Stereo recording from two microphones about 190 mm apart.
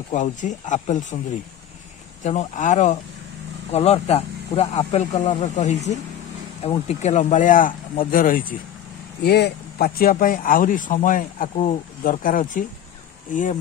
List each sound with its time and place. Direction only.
0.1 s speech: 40° left (ahead or behind)
2.2 s speech: 40° left (ahead or behind)
9.2 s speech: 55° left (ahead or behind); by 13.6 s 40° left (ahead or behind)